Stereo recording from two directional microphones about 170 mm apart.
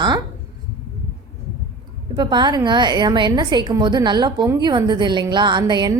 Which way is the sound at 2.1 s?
25° right (ahead or behind).